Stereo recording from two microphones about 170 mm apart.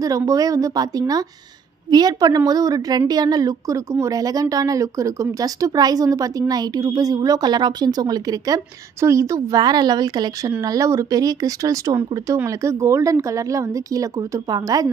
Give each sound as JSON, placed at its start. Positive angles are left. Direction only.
{"t": 0.0, "sound": "a woman's voice", "side_deg": -20}